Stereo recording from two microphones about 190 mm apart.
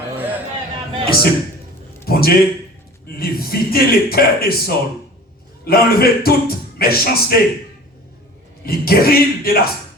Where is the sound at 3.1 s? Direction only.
55° left (ahead or behind).